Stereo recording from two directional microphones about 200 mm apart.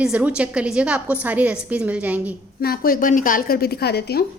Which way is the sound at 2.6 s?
50° left (ahead or behind).